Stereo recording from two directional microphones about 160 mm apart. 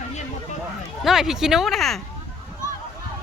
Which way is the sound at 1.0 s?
Centre (ahead or behind).